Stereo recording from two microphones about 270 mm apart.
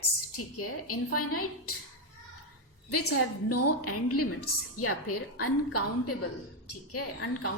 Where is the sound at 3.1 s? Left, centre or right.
Left.